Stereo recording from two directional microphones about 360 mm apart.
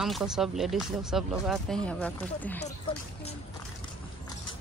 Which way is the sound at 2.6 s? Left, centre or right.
Centre.